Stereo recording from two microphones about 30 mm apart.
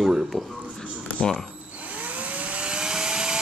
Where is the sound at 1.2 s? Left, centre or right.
Left.